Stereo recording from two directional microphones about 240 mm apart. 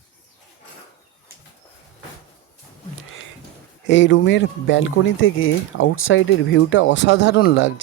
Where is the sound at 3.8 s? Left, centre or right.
Left.